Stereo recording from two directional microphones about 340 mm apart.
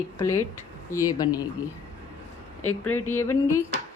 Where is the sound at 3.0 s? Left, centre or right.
Centre.